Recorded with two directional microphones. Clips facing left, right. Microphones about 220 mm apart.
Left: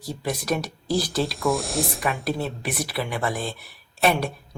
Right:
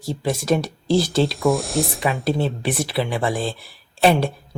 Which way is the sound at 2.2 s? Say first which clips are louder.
Right 5 dB; 30° right (ahead or behind).